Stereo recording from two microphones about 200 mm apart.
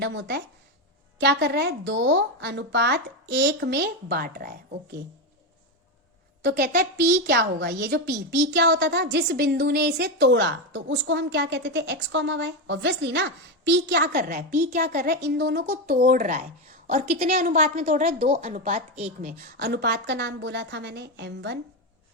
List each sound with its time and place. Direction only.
0.0 s a woman's voice: 60° right (ahead or behind); by 4.8 s 45° right (ahead or behind)
6.4 s a woman's voice: 50° right (ahead or behind)